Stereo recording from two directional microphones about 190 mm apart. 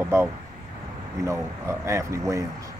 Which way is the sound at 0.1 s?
15° right (ahead or behind).